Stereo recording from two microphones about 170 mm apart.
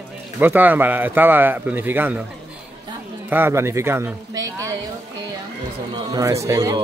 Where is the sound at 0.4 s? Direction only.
10° right (ahead or behind).